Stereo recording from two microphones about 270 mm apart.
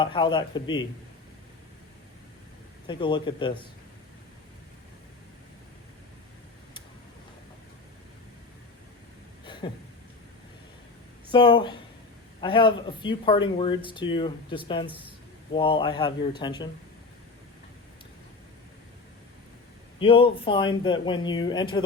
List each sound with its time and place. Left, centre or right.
0.0 s speech: centre
2.8 s speech: centre
9.6 s speech: centre
11.3 s speech: centre
20.0 s speech: centre